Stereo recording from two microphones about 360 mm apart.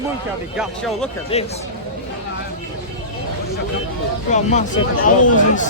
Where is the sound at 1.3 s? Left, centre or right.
Centre.